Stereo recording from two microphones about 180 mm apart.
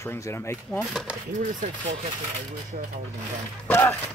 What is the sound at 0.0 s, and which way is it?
Speech, 15° left (ahead or behind).